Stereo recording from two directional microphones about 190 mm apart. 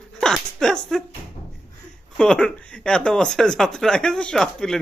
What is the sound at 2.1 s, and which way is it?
Speech, 5° left (ahead or behind).